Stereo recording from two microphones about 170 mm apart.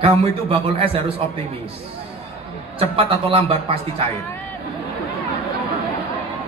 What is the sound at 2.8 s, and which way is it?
Speech, 30° right (ahead or behind).